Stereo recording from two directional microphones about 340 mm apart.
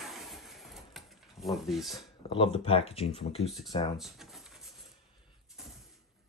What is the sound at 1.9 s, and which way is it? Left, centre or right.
Speech, centre.